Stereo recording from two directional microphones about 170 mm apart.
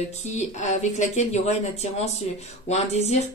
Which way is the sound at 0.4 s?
45° left (ahead or behind).